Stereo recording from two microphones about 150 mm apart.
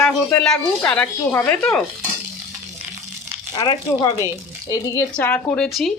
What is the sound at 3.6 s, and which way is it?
Speech, 30° left (ahead or behind).